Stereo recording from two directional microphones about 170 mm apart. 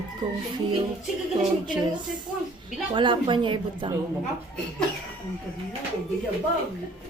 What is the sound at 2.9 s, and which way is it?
Speech, 30° right (ahead or behind).